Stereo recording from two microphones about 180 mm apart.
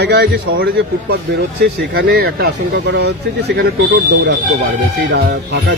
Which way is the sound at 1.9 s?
60° right (ahead or behind).